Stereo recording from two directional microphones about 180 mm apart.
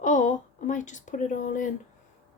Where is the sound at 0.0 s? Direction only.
45° left (ahead or behind).